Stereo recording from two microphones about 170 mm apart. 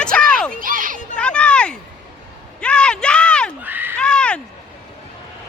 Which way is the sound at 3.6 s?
10° right (ahead or behind).